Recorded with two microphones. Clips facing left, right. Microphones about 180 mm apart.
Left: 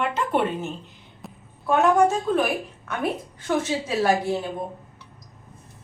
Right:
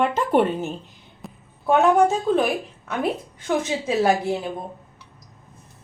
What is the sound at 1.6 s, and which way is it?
Speech, 25° right (ahead or behind).